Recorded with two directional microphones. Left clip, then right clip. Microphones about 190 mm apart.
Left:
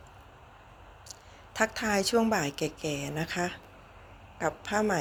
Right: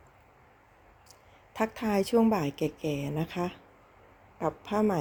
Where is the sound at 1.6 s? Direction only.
40° right (ahead or behind).